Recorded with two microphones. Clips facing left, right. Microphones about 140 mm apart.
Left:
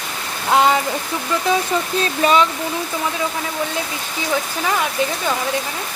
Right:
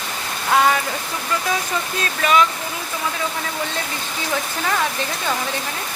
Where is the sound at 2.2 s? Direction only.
30° left (ahead or behind).